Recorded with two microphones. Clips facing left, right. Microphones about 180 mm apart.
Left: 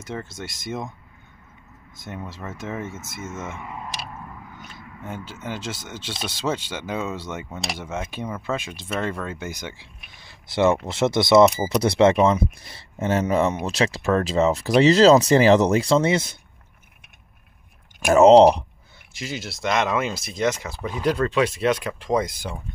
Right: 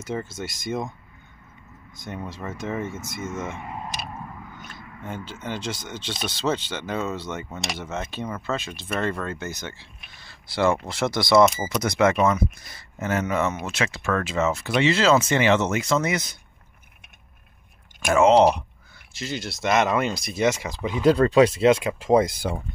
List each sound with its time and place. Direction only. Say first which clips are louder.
0.0 s speech: right 3 dB; 5° right (ahead or behind)
2.0 s speech: right 1 dB; 5° left (ahead or behind)
5.0 s speech: even; 5° left (ahead or behind); by 16.3 s 30° left (ahead or behind)
18.0 s speech: left 5 dB; 40° left (ahead or behind)
19.1 s speech: right 1 dB; 5° left (ahead or behind)
20.3 s speech: right 1 dB; 10° right (ahead or behind)
21.0 s speech: right 5 dB; 25° right (ahead or behind)